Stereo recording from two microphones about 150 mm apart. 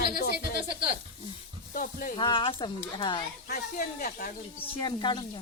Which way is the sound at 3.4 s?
75° left (ahead or behind).